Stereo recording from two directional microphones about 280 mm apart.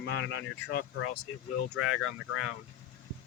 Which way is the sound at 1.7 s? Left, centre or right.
Left.